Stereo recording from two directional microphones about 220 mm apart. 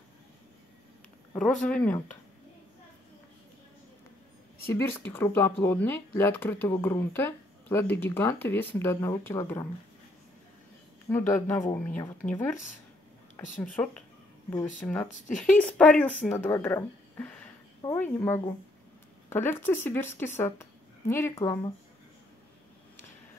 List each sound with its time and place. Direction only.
1.3 s speech: 5° left (ahead or behind)
4.6 s speech: 10° left (ahead or behind)
11.1 s speech: 10° left (ahead or behind)
13.6 s speech: 5° left (ahead or behind)
15.0 s speech: 35° left (ahead or behind)
15.3 s speech: 5° left (ahead or behind)